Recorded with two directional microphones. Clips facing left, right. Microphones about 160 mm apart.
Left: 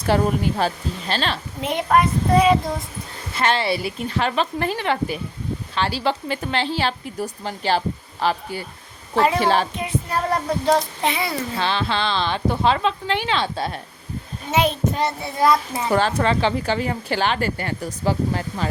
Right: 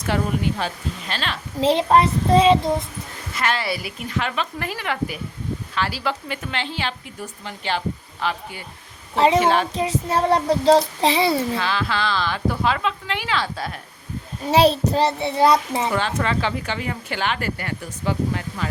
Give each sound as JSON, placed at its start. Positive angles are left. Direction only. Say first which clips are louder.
{"t": 0.0, "sound": "a woman's voice", "louder": "left 3 dB", "side_deg": 40}
{"t": 1.6, "sound": "a child's voice", "louder": "right 3 dB", "side_deg": -30}
{"t": 3.3, "sound": "a woman's voice", "louder": "left 3 dB", "side_deg": 30}
{"t": 9.1, "sound": "a child's voice", "louder": "right 2 dB", "side_deg": -25}
{"t": 9.4, "sound": "a woman's voice", "louder": "even", "side_deg": 35}
{"t": 10.1, "sound": "a child's voice", "louder": "right 5 dB", "side_deg": -25}
{"t": 11.5, "sound": "a woman's voice", "louder": "left 1 dB", "side_deg": 30}
{"t": 14.5, "sound": "a child's voice", "louder": "right 4 dB", "side_deg": -35}
{"t": 15.9, "sound": "a woman's voice", "louder": "left 7 dB", "side_deg": 40}